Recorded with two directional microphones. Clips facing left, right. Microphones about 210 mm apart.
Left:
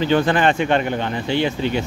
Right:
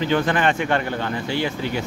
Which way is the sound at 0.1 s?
30° left (ahead or behind).